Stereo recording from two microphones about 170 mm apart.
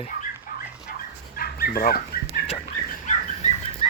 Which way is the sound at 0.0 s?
50° left (ahead or behind).